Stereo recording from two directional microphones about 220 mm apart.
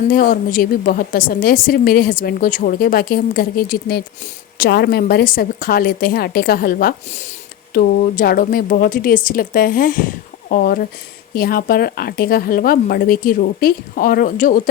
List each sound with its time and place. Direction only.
0.1 s a woman's voice: 40° left (ahead or behind)